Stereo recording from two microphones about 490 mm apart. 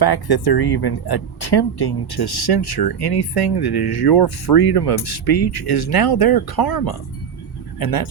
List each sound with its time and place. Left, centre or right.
0.0 s speech: left